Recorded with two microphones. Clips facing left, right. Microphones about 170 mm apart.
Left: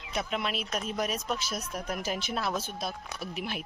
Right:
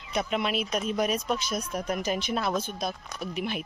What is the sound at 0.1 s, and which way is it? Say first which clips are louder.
Speech: right 4 dB; centre (ahead or behind).